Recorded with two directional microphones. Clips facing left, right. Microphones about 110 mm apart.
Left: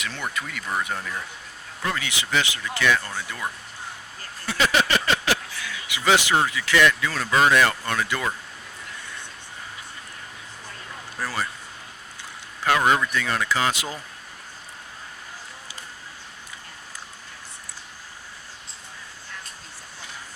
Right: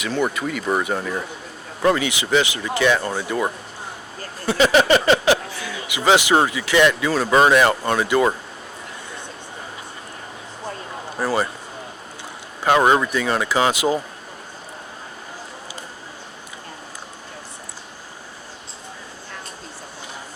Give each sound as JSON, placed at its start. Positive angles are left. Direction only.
{"t": 0.3, "sound": "speech", "side_deg": -10}
{"t": 4.4, "sound": "speech", "side_deg": -25}
{"t": 4.9, "sound": "a sound", "side_deg": -20}
{"t": 6.1, "sound": "speech", "side_deg": -20}
{"t": 7.3, "sound": "speech", "side_deg": -25}
{"t": 11.3, "sound": "speech", "side_deg": -20}
{"t": 12.6, "sound": "speech", "side_deg": -25}